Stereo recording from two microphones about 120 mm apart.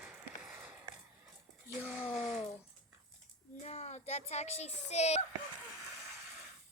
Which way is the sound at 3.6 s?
65° left (ahead or behind).